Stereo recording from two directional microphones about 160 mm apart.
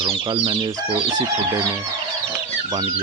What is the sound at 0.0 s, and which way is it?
Speech, 35° right (ahead or behind).